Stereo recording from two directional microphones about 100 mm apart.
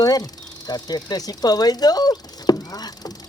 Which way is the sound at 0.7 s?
40° left (ahead or behind).